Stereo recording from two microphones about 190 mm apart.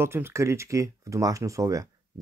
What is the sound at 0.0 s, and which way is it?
Speech, 10° right (ahead or behind).